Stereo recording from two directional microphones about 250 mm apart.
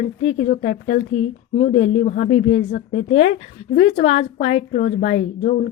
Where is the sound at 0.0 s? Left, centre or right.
Left.